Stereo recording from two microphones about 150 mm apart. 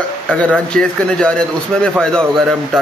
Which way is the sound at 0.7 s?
5° left (ahead or behind).